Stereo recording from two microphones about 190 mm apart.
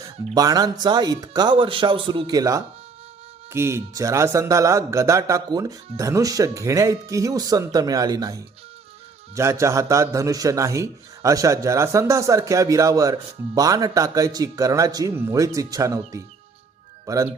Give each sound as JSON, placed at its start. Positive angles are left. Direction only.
{"t": 0.3, "sound": "a man's voice", "side_deg": -20}